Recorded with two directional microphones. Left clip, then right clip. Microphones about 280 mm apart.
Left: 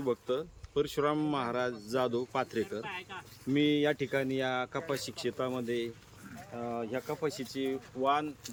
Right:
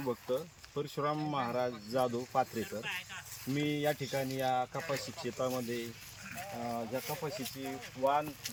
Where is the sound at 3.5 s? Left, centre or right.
Centre.